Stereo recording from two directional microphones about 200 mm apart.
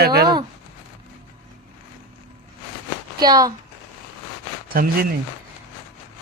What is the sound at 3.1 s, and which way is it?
Speech, 20° right (ahead or behind).